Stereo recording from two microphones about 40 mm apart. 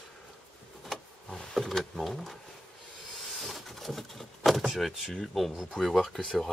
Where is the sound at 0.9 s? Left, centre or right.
Centre.